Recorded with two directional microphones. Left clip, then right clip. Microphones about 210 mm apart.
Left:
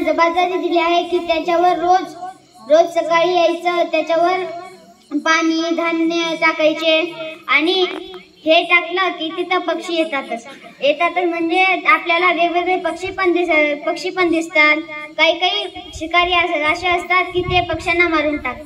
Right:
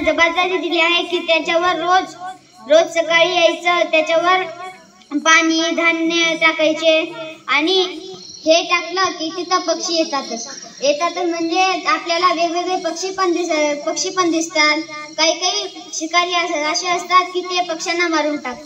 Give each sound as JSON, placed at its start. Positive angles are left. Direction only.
{"t": 0.0, "sound": "a woman's voice", "side_deg": -30}